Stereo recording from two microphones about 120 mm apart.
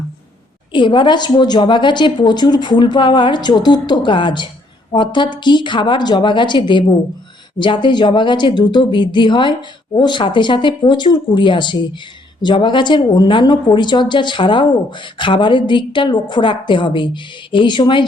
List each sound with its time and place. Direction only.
0.7 s a woman's voice: 40° left (ahead or behind)